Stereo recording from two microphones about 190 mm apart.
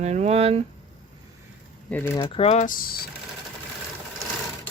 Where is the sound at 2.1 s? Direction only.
25° left (ahead or behind); by 2.9 s 45° left (ahead or behind).